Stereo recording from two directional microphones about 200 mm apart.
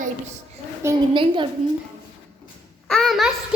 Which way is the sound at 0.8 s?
10° right (ahead or behind).